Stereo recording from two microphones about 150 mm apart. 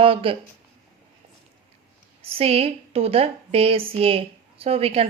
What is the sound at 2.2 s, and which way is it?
A woman's voice, 40° right (ahead or behind).